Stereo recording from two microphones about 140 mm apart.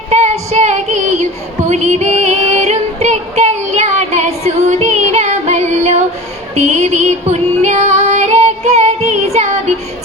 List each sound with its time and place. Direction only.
0.1 s music: 50° right (ahead or behind)
6.6 s female singing: 50° right (ahead or behind)